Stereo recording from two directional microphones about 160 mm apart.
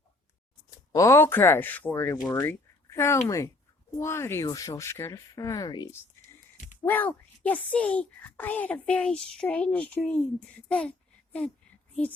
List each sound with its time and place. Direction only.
0.9 s a child's voice: 15° left (ahead or behind)
6.8 s a child's voice: 10° left (ahead or behind)